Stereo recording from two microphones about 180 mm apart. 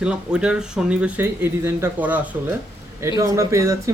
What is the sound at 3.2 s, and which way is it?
Speech, 15° right (ahead or behind).